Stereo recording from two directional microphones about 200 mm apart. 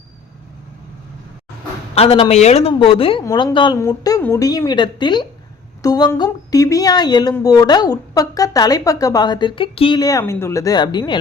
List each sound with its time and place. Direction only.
2.0 s speech: 30° left (ahead or behind)